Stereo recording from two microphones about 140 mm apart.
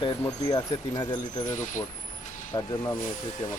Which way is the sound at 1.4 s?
60° left (ahead or behind).